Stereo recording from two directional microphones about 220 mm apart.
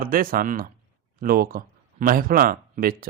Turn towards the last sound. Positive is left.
turn(degrees=-40)  # may be behind; listen again after turning